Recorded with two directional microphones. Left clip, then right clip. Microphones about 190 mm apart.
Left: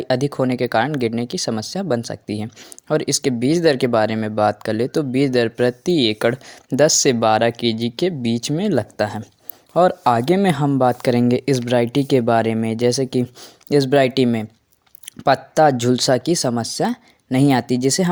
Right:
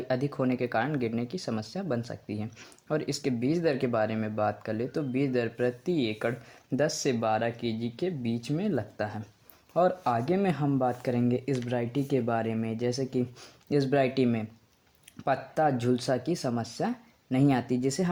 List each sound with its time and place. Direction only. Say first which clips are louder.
0.1 s speech: left 10 dB; 35° left (ahead or behind)